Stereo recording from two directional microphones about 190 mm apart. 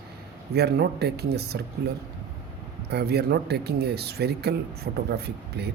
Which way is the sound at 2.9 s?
60° right (ahead or behind).